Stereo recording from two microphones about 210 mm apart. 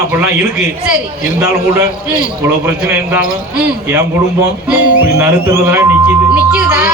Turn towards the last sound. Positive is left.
turn(degrees=-10)  # may be behind; listen again after turning